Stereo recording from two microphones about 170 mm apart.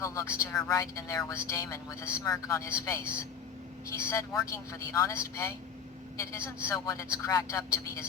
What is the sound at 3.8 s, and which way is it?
Speech, 15° left (ahead or behind).